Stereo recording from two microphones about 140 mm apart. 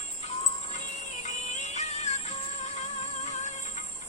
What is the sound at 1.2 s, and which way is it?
Music, 55° left (ahead or behind).